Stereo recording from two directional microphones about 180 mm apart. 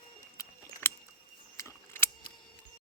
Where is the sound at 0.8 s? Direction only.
15° left (ahead or behind).